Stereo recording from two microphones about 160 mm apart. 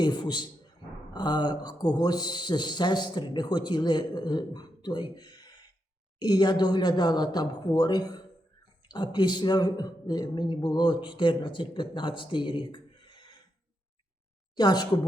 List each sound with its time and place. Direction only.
0.0 s speech: 25° left (ahead or behind)
14.5 s a woman's voice: 25° left (ahead or behind)